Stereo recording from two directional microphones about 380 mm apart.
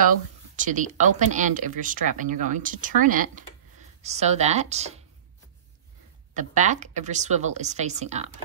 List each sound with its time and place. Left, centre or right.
0.6 s a woman's voice: centre
6.3 s a woman's voice: centre